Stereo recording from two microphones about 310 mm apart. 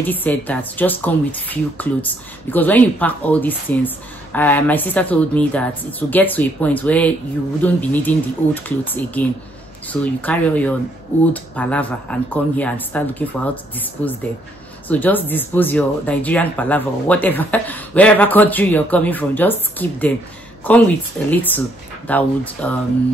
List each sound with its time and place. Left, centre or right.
0.0 s speech: centre